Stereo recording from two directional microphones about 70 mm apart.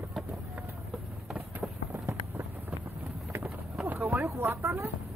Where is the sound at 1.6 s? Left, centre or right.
Right.